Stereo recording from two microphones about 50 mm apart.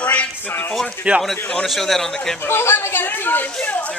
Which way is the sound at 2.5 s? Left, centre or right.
Left.